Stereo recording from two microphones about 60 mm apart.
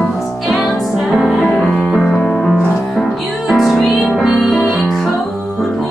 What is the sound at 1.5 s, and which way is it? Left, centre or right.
Music, centre.